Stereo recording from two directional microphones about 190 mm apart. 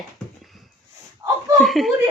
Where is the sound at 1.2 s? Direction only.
20° right (ahead or behind).